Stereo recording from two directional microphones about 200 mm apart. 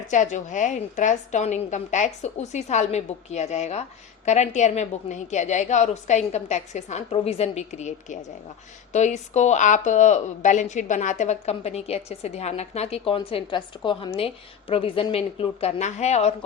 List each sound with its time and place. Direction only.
0.1 s a woman's voice: 40° left (ahead or behind)